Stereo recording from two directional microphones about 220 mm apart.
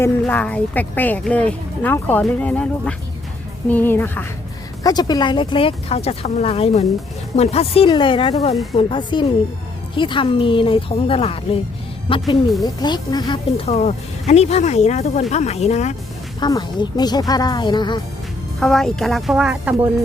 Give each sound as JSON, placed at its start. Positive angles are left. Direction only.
{"t": 0.0, "sound": "speech", "side_deg": 5}
{"t": 16.4, "sound": "speech", "side_deg": 20}
{"t": 18.6, "sound": "speech", "side_deg": 0}